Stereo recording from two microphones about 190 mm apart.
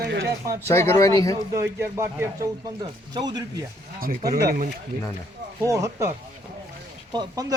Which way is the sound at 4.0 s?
50° right (ahead or behind).